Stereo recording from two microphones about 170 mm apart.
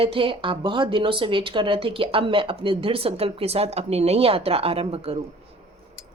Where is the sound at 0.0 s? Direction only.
30° right (ahead or behind).